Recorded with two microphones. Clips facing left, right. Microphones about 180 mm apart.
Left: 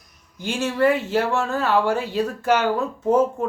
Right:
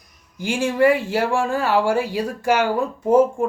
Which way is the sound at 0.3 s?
10° right (ahead or behind).